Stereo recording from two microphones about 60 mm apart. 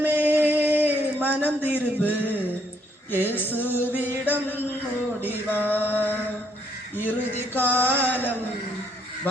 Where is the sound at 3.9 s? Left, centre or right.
Right.